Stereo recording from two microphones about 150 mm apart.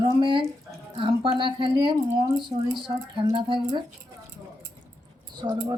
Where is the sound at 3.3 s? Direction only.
30° right (ahead or behind).